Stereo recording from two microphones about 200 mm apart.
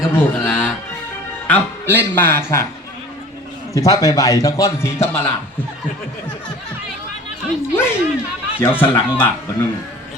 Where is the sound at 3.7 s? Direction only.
15° left (ahead or behind).